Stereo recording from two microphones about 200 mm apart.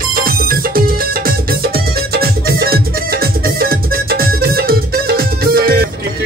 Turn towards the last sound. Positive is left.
turn(degrees=-50)  # may be behind; listen again after turning